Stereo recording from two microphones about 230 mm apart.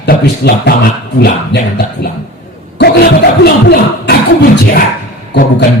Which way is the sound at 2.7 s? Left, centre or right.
Left.